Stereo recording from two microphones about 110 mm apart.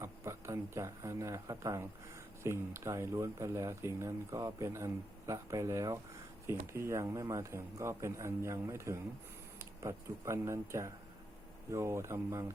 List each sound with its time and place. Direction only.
0.0 s speech: 25° right (ahead or behind)